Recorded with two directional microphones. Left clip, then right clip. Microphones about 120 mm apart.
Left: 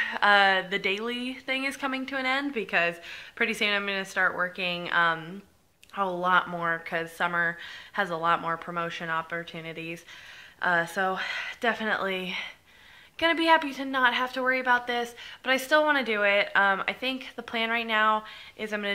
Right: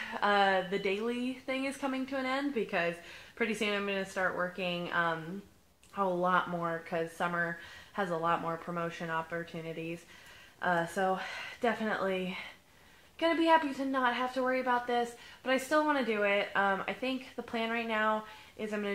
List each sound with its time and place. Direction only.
0.0 s speech: 15° left (ahead or behind)
4.2 s a woman's voice: 30° left (ahead or behind)
4.6 s speech: 15° left (ahead or behind)